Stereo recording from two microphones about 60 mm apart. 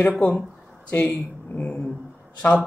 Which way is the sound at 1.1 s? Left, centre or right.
Left.